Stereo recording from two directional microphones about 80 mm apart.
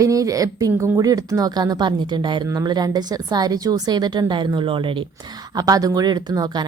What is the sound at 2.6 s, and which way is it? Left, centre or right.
Speech, right.